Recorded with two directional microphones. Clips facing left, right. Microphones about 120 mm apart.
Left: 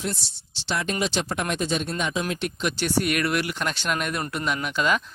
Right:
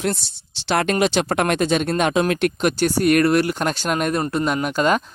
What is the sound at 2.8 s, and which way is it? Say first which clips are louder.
Speech: right 8 dB; 40° right (ahead or behind).